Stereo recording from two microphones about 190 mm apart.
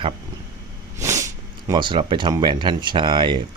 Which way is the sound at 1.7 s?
25° right (ahead or behind).